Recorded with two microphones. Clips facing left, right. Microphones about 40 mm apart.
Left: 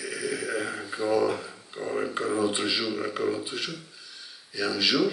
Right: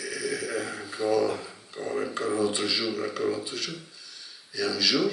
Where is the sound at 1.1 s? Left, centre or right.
Centre.